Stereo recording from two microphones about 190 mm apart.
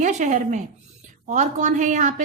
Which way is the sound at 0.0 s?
40° right (ahead or behind).